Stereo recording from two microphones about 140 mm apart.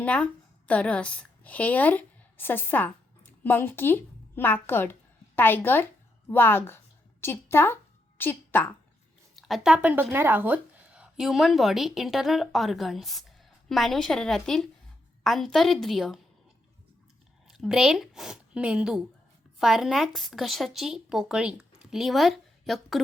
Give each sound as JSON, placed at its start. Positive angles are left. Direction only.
{"t": 0.0, "sound": "a woman's voice", "side_deg": 10}
{"t": 9.3, "sound": "speech", "side_deg": 0}
{"t": 17.5, "sound": "speech", "side_deg": -5}